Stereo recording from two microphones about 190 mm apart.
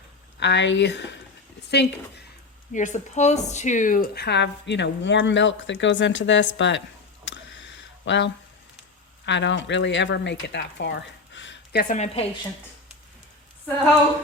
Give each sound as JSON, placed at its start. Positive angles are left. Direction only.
{"t": 0.3, "sound": "a woman's voice", "side_deg": 65}
{"t": 2.7, "sound": "speech", "side_deg": 40}
{"t": 7.3, "sound": "a sound", "side_deg": 70}
{"t": 9.2, "sound": "speech", "side_deg": 70}
{"t": 11.9, "sound": "a woman's voice", "side_deg": 35}